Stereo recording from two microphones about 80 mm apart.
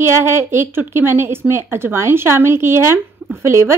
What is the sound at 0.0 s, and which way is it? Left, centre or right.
A woman's voice, right.